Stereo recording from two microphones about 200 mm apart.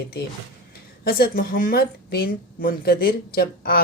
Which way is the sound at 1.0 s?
50° left (ahead or behind).